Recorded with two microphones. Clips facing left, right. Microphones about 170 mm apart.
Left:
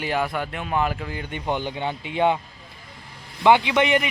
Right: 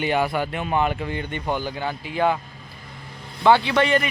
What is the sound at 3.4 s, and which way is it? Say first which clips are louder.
Speech: even; 15° left (ahead or behind).